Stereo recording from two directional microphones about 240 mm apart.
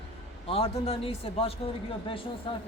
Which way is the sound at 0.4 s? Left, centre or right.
Left.